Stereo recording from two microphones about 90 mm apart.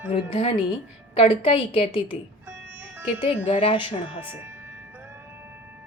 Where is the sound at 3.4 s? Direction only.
85° left.